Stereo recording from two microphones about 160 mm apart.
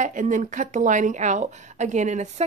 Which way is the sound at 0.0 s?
55° right (ahead or behind).